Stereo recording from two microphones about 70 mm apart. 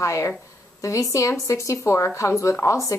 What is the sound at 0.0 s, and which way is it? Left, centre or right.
A woman's voice, left.